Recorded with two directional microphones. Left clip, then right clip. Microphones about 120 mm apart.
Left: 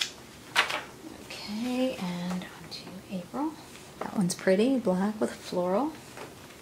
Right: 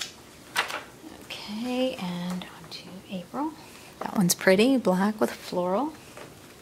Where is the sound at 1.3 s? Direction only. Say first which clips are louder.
Right 2 dB; 15° right (ahead or behind).